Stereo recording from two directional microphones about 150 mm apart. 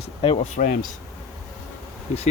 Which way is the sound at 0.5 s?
65° left (ahead or behind).